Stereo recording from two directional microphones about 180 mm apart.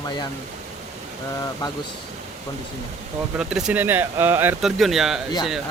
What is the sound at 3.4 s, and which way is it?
Speech, 5° right (ahead or behind).